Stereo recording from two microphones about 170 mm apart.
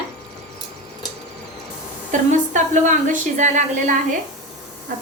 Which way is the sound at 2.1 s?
45° right (ahead or behind).